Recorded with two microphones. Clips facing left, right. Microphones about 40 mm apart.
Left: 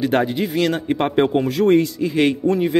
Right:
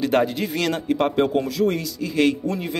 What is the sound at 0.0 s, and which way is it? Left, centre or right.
Speech, centre.